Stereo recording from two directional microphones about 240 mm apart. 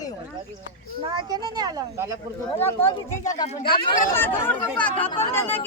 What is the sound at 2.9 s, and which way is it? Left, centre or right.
Speech, left.